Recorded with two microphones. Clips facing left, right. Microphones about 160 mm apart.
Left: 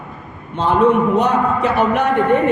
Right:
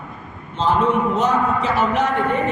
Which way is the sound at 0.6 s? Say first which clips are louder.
Left 4 dB; 60° left (ahead or behind).